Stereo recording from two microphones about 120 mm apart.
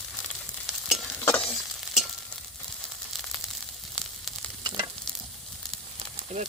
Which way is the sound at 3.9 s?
Centre (ahead or behind).